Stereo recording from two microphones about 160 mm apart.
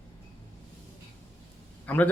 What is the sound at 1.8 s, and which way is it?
Speech, 10° left (ahead or behind).